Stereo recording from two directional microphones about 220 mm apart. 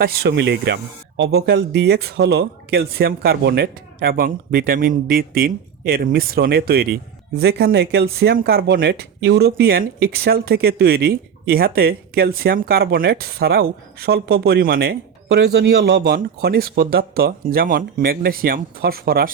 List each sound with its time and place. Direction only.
0.0 s speech: 45° right (ahead or behind)